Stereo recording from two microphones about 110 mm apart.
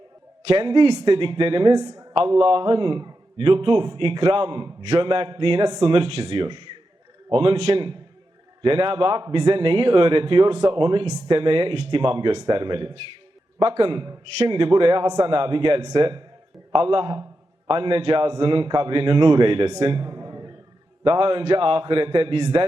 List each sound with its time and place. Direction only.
0.4 s a man's voice: 50° right (ahead or behind)
0.9 s speech: 35° right (ahead or behind)
1.1 s a man's voice: 50° right (ahead or behind)
1.7 s a man's voice: 40° right (ahead or behind)
2.1 s a man's voice: 55° right (ahead or behind)
8.6 s a man's voice: 55° right (ahead or behind)
11.0 s speech: 35° right (ahead or behind)
11.3 s a man's voice: 55° right (ahead or behind)
15.0 s speech: 40° right (ahead or behind)
15.3 s a man's voice: 55° right (ahead or behind)
19.8 s a sound: 45° right (ahead or behind)
21.0 s a man's voice: 55° right (ahead or behind)